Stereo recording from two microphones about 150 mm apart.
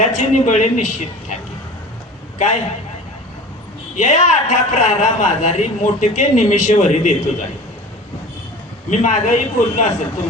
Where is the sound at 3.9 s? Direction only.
50° left (ahead or behind).